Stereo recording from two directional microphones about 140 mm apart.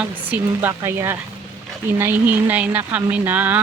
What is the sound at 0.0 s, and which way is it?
Speech, 15° right (ahead or behind).